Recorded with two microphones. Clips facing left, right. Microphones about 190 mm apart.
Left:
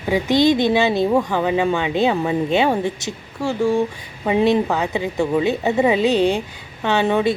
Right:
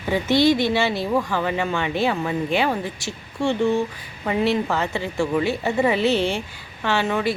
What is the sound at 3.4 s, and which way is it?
Speech, 5° left (ahead or behind).